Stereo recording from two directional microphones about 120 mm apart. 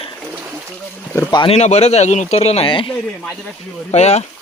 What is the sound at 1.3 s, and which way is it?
Speech, 40° left (ahead or behind).